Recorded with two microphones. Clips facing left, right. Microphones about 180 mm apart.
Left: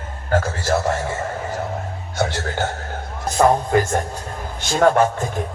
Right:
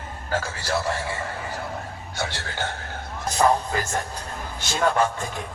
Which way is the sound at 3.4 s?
50° left (ahead or behind).